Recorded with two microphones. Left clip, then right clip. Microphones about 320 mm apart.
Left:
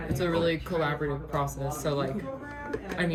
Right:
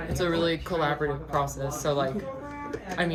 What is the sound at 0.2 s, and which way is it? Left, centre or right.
Speech, centre.